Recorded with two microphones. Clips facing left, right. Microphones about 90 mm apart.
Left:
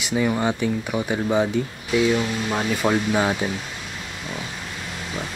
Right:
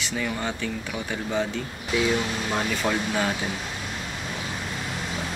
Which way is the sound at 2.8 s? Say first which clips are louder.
Left 8 dB; 20° left (ahead or behind).